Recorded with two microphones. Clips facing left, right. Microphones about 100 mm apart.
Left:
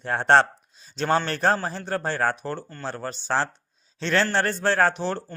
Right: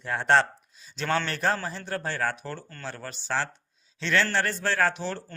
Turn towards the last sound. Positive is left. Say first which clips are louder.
# left 4 dB
turn(degrees=35)  # may be behind; listen again after turning